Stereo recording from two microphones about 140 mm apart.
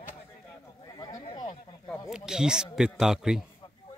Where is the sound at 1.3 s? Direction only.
35° left (ahead or behind).